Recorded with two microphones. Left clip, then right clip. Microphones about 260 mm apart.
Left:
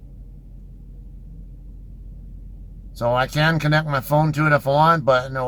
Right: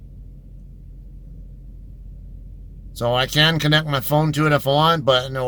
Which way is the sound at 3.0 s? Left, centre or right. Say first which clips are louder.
Right 2 dB; right.